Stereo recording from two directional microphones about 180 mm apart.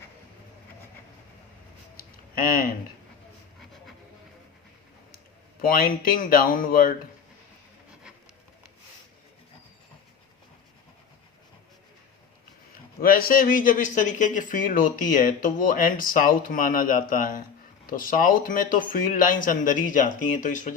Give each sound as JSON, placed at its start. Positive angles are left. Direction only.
{"t": 2.4, "sound": "a man's voice", "side_deg": 50}
{"t": 5.6, "sound": "a man's voice", "side_deg": 50}
{"t": 12.7, "sound": "a man's voice", "side_deg": 55}